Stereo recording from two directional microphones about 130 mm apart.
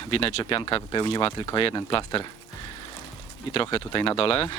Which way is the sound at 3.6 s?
40° left (ahead or behind).